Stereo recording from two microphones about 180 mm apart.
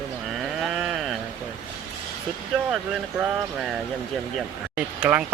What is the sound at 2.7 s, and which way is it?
Speech, 5° right (ahead or behind).